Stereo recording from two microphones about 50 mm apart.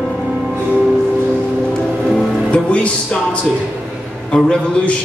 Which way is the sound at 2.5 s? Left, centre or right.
Left.